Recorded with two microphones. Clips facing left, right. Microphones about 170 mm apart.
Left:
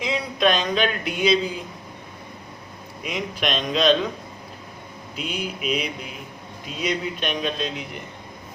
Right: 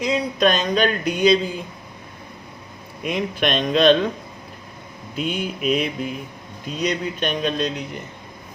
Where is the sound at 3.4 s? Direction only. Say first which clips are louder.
Right 4 dB; 55° right (ahead or behind).